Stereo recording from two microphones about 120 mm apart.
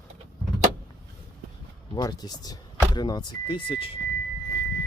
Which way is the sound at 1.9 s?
35° left (ahead or behind).